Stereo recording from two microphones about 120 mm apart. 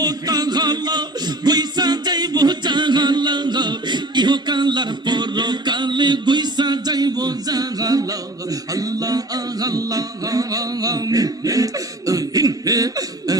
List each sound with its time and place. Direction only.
0.0 s a capella: 35° right (ahead or behind)
8.4 s music: 30° right (ahead or behind)